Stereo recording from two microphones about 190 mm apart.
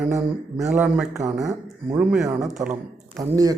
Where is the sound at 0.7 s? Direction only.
5° right (ahead or behind).